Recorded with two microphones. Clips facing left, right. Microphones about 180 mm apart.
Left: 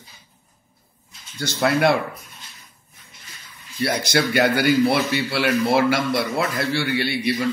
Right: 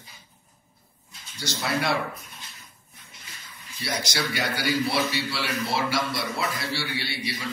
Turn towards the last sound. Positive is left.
turn(degrees=55)  # may be behind; listen again after turning